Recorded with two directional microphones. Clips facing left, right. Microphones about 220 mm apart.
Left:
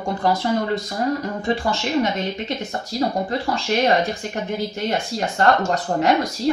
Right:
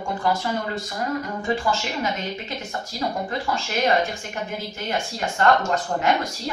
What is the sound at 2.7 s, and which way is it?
Speech, 35° left (ahead or behind).